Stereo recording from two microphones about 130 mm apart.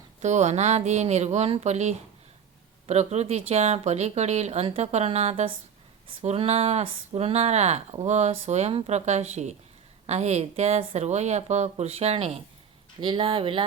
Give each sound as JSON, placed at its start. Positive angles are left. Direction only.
{"t": 0.2, "sound": "speech", "side_deg": -65}